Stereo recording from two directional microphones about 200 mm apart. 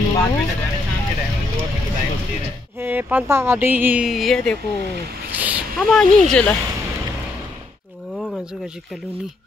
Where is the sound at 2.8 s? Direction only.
10° right (ahead or behind).